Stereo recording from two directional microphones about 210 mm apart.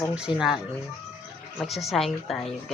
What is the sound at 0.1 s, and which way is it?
Speech, 5° right (ahead or behind).